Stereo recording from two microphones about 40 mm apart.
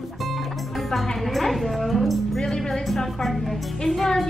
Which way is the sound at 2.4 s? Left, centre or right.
Centre.